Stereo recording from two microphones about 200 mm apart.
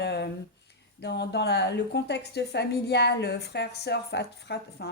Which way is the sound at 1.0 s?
60° left (ahead or behind).